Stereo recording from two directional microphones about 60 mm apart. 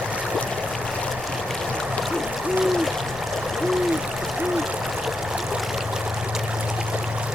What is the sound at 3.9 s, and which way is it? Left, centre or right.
Hoot, centre.